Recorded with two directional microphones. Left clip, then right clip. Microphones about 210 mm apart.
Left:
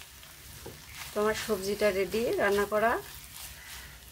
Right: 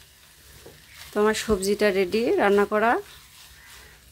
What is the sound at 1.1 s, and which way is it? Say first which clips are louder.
Speech: right 7 dB; 55° right (ahead or behind).